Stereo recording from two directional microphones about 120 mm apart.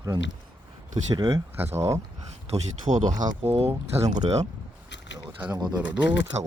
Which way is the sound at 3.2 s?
75° right (ahead or behind).